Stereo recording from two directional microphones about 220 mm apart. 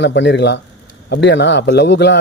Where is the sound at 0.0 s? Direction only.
55° left (ahead or behind).